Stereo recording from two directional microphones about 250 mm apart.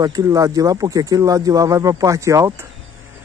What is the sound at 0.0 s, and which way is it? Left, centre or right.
Speech, centre.